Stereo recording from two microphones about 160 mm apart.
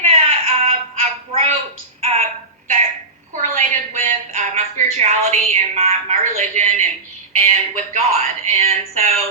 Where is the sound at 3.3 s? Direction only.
50° right (ahead or behind).